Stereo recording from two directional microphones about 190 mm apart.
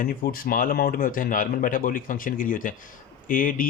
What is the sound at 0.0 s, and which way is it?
Speech, 50° left (ahead or behind).